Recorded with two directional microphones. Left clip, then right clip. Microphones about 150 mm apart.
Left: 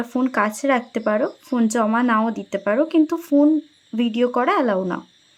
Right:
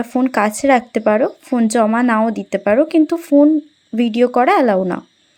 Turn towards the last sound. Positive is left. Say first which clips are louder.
# right 6 dB
turn(degrees=-30)  # may be behind; listen again after turning